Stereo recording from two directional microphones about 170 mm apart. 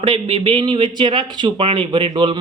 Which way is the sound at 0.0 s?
30° right (ahead or behind).